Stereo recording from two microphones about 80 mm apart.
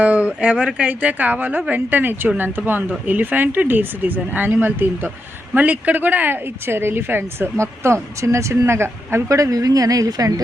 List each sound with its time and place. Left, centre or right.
0.0 s speech: centre; by 10.4 s right